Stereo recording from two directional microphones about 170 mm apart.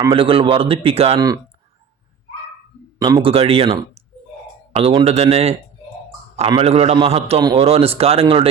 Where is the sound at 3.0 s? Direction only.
25° right (ahead or behind).